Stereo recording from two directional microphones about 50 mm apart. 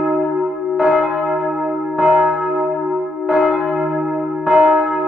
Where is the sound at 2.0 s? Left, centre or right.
Right.